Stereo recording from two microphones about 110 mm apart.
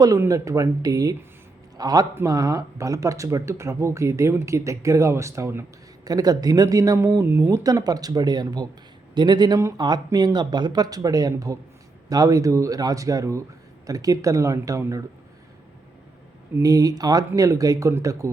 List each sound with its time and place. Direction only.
0.2 s speech: 30° right (ahead or behind)
6.1 s speech: 35° right (ahead or behind)
16.6 s speech: 35° right (ahead or behind)